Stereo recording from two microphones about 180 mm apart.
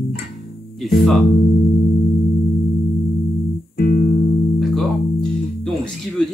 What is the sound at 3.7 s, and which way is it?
Music, 55° left (ahead or behind).